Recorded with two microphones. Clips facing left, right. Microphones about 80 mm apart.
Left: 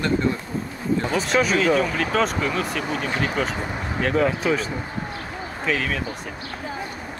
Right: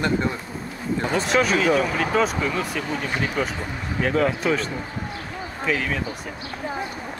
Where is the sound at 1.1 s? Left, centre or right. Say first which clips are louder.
Right 1 dB; centre.